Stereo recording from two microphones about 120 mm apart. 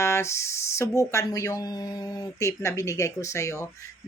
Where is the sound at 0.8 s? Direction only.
25° left (ahead or behind).